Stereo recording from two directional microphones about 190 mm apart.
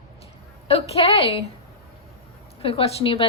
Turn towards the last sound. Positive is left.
turn(degrees=30)  # may be behind; listen again after turning